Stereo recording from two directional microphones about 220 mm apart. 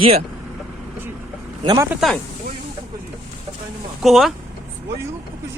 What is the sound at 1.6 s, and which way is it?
Speech, 15° right (ahead or behind).